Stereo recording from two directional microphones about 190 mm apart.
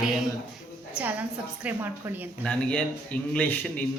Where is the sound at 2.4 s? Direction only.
5° left (ahead or behind).